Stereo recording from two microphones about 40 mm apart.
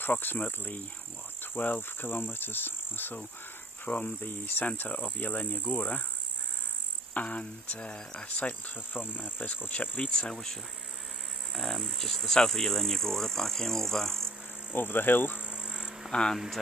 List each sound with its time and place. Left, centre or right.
0.0 s insect: left
3.8 s insect: left
7.2 s speech: left
8.5 s insect: left
9.7 s speech: left
10.0 s speech: left
10.3 s insect: centre
11.5 s speech: centre
12.4 s insect: centre
14.7 s insect: left
15.3 s cricket: right
16.1 s speech: centre